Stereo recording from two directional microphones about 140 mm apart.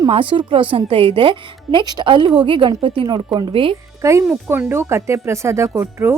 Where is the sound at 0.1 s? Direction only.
35° right (ahead or behind).